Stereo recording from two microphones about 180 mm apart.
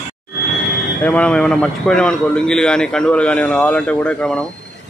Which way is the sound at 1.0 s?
5° left (ahead or behind).